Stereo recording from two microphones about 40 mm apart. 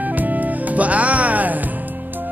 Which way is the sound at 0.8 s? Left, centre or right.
Right.